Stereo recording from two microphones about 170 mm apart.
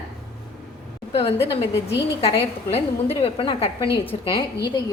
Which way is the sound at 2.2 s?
35° left (ahead or behind).